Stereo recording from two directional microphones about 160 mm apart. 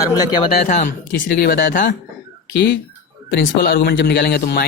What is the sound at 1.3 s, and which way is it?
Speech, 70° left (ahead or behind).